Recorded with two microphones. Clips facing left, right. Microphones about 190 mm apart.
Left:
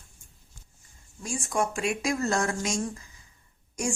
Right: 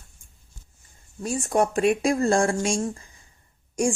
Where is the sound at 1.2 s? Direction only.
40° right (ahead or behind).